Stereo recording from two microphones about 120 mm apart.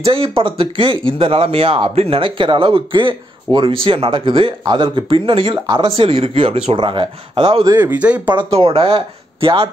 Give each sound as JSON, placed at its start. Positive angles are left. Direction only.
{"t": 0.0, "sound": "speech", "side_deg": -50}
{"t": 7.8, "sound": "speech", "side_deg": -10}
{"t": 8.4, "sound": "speech", "side_deg": -50}